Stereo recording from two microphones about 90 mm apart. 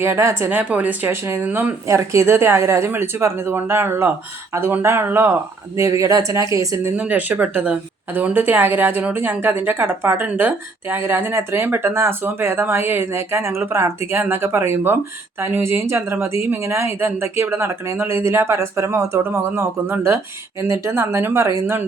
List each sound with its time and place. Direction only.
0.0 s speech: 30° right (ahead or behind)
0.6 s speech: 15° right (ahead or behind)
1.5 s speech: 20° right (ahead or behind)
1.9 s speech: 35° right (ahead or behind)
6.9 s speech: 15° right (ahead or behind)